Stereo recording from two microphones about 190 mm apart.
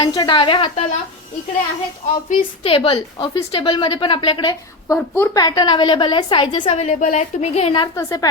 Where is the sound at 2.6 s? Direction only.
30° left (ahead or behind).